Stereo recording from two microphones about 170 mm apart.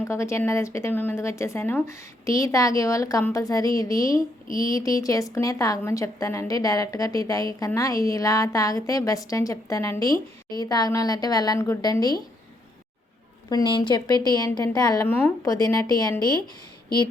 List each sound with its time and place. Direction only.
0.0 s a woman's voice: 15° left (ahead or behind)
13.5 s a woman's voice: 25° left (ahead or behind)